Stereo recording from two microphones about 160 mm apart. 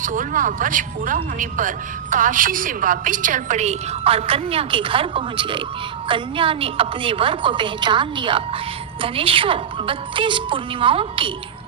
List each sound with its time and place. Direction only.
0.0 s a woman's voice: 55° right (ahead or behind); by 11.3 s 35° right (ahead or behind)